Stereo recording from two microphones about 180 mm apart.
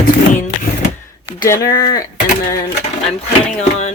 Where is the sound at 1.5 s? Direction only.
15° left (ahead or behind).